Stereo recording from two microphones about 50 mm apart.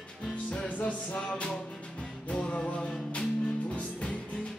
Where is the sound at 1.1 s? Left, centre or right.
Centre.